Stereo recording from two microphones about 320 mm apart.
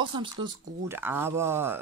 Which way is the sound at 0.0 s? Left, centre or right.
Centre.